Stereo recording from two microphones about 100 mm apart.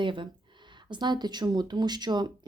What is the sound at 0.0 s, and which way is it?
Speech, 55° right (ahead or behind).